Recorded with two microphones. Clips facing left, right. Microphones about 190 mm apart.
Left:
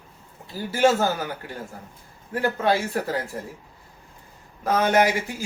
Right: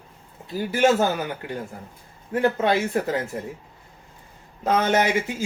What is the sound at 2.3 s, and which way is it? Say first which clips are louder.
Speech: right 2 dB; 20° right (ahead or behind).